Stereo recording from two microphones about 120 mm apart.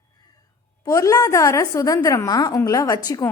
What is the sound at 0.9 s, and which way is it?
A woman's voice, 25° left (ahead or behind).